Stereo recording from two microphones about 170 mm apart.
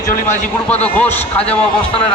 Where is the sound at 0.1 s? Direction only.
50° left (ahead or behind).